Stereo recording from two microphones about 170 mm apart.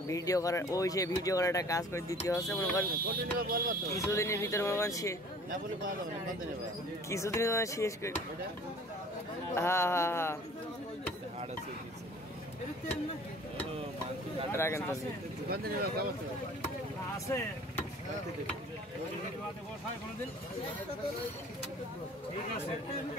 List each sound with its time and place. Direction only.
0.1 s speech: 20° left (ahead or behind)
3.1 s speech: 60° right (ahead or behind)
4.0 s speech: 15° left (ahead or behind)
5.5 s speech: 55° right (ahead or behind)
7.1 s speech: 15° left (ahead or behind)
9.6 s speech: 15° left (ahead or behind)
14.5 s speech: 15° left (ahead or behind)
15.5 s speech: 65° right (ahead or behind)